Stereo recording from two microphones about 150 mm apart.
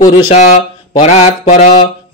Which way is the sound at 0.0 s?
50° left (ahead or behind).